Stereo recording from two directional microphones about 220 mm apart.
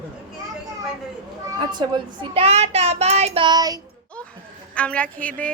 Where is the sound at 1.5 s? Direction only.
20° right (ahead or behind).